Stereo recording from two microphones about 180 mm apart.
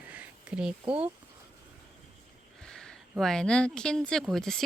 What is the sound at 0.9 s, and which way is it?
Speech, 30° right (ahead or behind).